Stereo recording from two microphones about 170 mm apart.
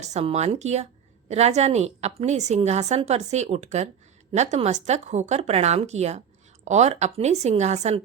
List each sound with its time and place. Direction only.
0.0 s a woman's voice: 40° right (ahead or behind)